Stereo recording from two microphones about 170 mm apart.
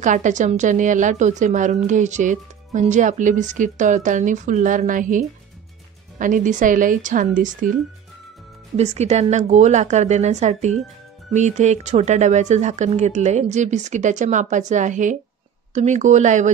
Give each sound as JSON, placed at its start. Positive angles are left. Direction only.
{"t": 0.0, "sound": "a woman's voice", "side_deg": -45}
{"t": 8.7, "sound": "a woman's voice", "side_deg": -40}